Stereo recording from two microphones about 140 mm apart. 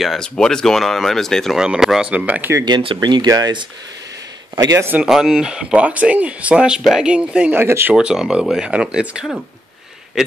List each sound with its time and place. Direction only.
0.0 s speech: centre (ahead or behind)
2.5 s a man's voice: 30° right (ahead or behind)
5.0 s speech: 5° right (ahead or behind)
7.9 s speech: 5° right (ahead or behind)